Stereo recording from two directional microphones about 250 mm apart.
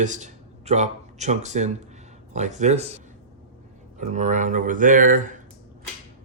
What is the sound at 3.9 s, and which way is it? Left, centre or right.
Speech, right.